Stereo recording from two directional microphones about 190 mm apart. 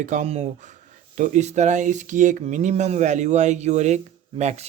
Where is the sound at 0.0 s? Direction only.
40° right (ahead or behind).